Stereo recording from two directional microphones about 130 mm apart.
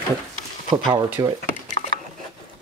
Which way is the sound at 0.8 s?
35° right (ahead or behind).